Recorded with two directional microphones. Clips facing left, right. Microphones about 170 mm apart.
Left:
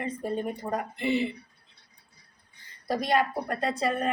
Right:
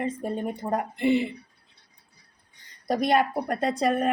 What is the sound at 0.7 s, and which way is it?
Speech, 55° right (ahead or behind).